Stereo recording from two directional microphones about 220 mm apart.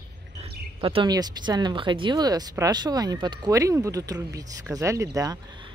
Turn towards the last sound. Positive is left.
turn(degrees=-20)  # may be behind; listen again after turning